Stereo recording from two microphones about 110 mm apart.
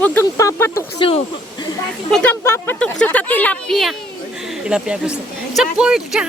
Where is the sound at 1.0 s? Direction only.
55° left (ahead or behind).